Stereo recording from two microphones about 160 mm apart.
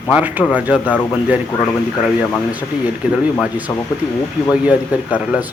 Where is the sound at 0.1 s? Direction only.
10° right (ahead or behind).